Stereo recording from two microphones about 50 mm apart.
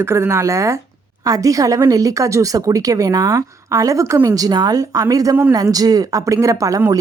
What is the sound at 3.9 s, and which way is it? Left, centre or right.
Speech, right.